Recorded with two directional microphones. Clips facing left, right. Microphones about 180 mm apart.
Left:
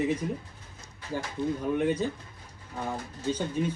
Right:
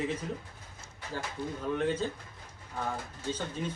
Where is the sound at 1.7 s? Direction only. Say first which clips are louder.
Left 2 dB; 15° left (ahead or behind).